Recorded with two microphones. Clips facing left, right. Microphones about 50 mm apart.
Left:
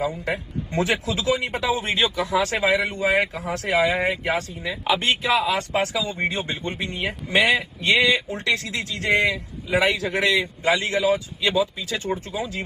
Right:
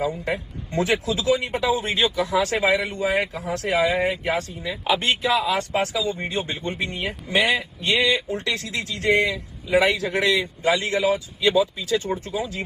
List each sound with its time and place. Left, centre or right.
0.2 s a man's voice: left